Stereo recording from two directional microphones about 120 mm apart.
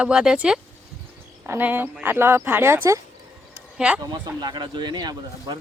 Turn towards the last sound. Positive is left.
turn(degrees=-35)  # may be behind; listen again after turning